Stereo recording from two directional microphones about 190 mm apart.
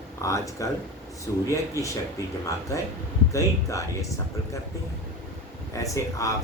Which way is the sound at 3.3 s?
15° left (ahead or behind).